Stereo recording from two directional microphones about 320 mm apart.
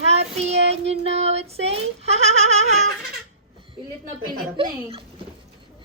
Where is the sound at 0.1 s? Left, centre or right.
Centre.